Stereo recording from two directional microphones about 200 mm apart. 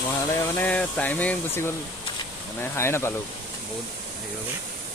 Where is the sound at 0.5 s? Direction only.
10° left (ahead or behind).